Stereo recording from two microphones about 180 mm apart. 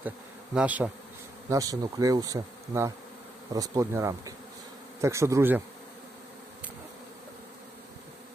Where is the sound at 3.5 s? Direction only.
20° right (ahead or behind).